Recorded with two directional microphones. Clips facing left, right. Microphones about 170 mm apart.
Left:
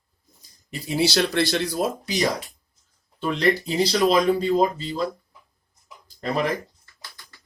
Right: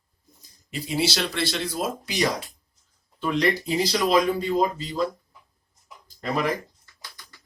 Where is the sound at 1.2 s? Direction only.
45° left (ahead or behind).